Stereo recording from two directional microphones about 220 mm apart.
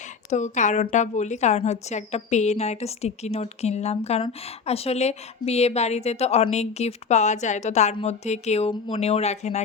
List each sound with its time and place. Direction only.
0.3 s a woman's voice: 35° left (ahead or behind)